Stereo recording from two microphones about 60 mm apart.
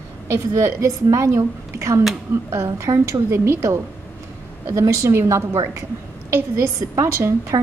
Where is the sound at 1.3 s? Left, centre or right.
Right.